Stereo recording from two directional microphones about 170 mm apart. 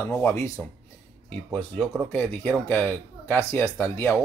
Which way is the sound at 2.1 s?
10° left (ahead or behind).